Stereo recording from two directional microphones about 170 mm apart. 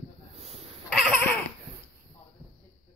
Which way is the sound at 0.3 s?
35° right (ahead or behind).